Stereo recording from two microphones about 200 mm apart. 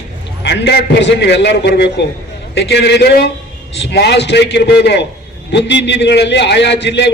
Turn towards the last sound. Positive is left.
turn(degrees=60)  # may be behind; listen again after turning